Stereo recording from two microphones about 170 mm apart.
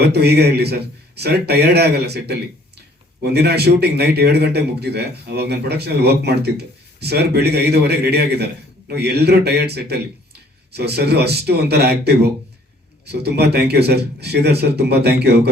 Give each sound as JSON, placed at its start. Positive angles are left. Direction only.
{"t": 0.0, "sound": "a man's voice", "side_deg": -75}